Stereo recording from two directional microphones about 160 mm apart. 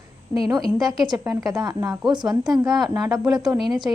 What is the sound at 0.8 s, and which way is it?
A woman's voice, 25° right (ahead or behind).